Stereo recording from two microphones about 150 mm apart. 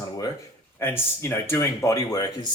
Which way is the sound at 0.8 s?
15° left (ahead or behind).